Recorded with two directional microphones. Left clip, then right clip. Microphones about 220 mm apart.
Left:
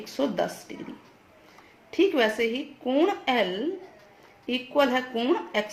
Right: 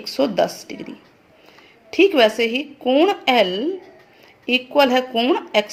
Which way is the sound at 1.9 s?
25° right (ahead or behind).